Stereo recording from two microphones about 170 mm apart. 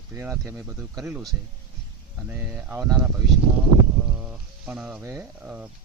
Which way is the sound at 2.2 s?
10° right (ahead or behind).